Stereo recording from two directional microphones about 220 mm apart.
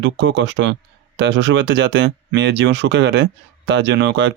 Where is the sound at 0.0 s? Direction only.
55° right (ahead or behind).